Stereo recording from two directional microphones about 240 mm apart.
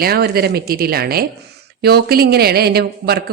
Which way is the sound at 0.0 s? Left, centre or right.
Right.